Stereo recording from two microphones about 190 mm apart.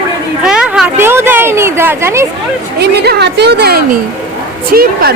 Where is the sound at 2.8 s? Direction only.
60° right (ahead or behind).